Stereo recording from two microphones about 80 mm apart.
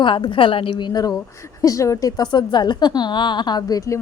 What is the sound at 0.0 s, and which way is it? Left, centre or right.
A woman's voice, left.